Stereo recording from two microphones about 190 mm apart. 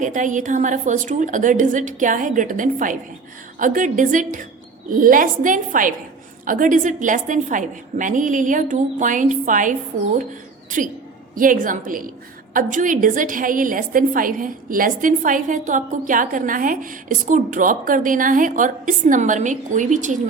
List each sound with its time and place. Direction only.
0.0 s a woman's voice: 40° right (ahead or behind)
11.3 s a woman's voice: 45° right (ahead or behind)